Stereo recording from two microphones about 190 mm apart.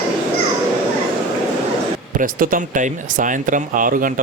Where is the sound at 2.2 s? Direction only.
45° right (ahead or behind).